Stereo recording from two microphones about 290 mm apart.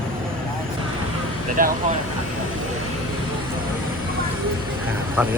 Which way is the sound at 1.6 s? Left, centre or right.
Right.